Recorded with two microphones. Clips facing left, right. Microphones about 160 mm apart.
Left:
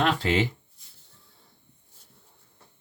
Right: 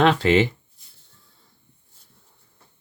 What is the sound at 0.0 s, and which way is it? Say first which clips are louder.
Speech: right 7 dB; 75° right (ahead or behind).